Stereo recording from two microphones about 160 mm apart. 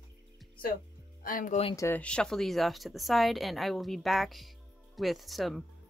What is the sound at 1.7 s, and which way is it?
Speech, 20° left (ahead or behind).